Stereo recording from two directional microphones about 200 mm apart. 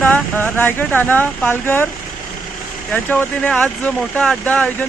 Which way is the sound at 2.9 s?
5° left (ahead or behind).